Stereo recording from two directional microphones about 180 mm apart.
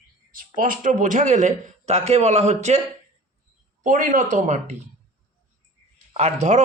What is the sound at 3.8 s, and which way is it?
Speech, 45° right (ahead or behind).